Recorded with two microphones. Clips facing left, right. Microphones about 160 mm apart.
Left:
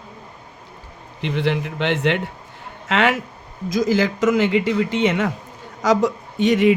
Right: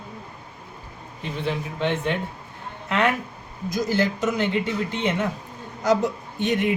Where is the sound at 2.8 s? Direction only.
90° left.